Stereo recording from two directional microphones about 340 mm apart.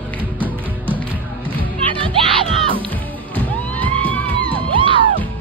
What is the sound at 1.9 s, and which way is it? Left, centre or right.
Music, centre.